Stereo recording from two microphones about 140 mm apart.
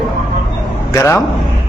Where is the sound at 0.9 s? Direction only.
20° left (ahead or behind).